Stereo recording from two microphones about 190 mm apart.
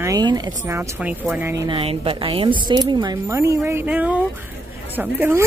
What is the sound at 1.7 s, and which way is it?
Speech, 30° right (ahead or behind).